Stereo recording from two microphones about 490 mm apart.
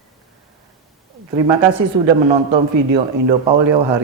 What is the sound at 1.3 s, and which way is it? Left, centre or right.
Speech, right.